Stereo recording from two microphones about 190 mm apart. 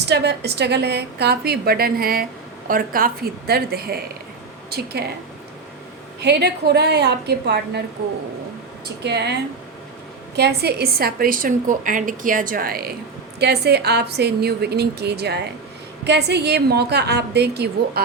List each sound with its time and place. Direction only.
0.0 s a woman's voice: 60° right (ahead or behind)
6.1 s a woman's voice: 60° right (ahead or behind)
9.0 s a woman's voice: 60° right (ahead or behind)
10.3 s a woman's voice: 60° right (ahead or behind)